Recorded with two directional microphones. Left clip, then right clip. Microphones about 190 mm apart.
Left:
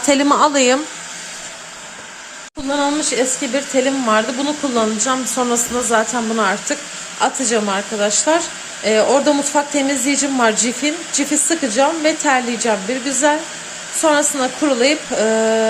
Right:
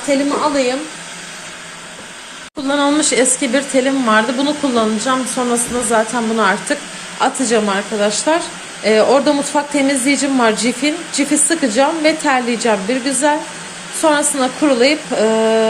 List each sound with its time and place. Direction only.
0.1 s speech: 55° left (ahead or behind)
2.6 s speech: 5° left (ahead or behind)